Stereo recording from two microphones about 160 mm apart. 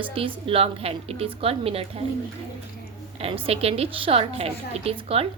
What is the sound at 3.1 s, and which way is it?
A woman's voice, 35° right (ahead or behind).